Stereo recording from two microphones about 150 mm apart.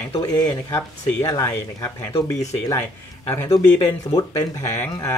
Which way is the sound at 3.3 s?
20° left (ahead or behind).